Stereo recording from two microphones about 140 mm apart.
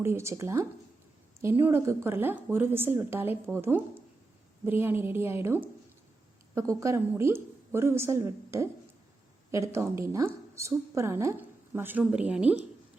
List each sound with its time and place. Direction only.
0.0 s a woman's voice: 20° right (ahead or behind)